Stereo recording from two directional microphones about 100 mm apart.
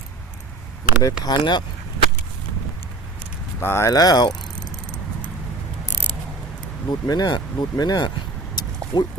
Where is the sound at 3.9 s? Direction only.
40° left (ahead or behind).